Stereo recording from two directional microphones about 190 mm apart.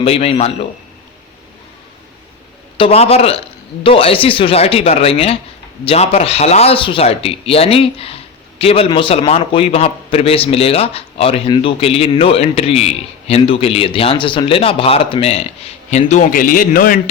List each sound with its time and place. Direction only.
0.0 s speech: 30° left (ahead or behind)
2.7 s speech: 30° left (ahead or behind); by 17.0 s 50° left (ahead or behind)